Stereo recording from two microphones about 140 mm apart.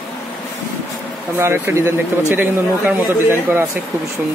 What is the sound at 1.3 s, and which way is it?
Speech, 15° right (ahead or behind).